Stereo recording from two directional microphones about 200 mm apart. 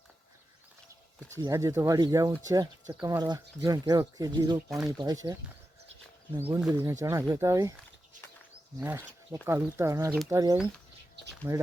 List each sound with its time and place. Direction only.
1.4 s speech: 15° right (ahead or behind)
8.8 s speech: 10° right (ahead or behind)